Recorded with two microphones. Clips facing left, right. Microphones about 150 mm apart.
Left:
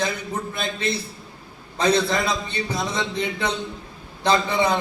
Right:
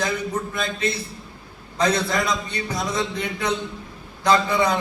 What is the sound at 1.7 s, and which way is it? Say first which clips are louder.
A man's voice: left 1 dB; 30° left (ahead or behind).